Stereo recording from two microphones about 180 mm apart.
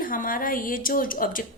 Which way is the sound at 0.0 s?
50° left (ahead or behind).